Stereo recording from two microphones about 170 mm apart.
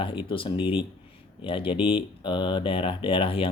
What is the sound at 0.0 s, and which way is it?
Speech, 30° left (ahead or behind).